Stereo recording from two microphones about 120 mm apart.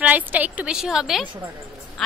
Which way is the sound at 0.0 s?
15° right (ahead or behind).